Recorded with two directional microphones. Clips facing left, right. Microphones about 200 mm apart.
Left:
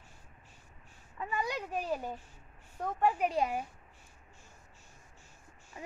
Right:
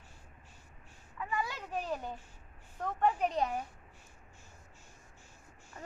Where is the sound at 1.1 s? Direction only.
30° left (ahead or behind).